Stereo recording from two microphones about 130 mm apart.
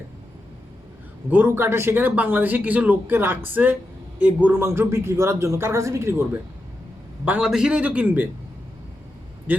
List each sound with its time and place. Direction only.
1.3 s a man's voice: 15° right (ahead or behind)